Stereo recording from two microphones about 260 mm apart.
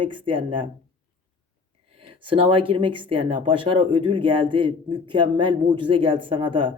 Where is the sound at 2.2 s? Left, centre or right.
Centre.